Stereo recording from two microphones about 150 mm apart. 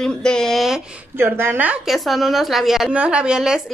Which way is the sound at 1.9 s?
Centre (ahead or behind).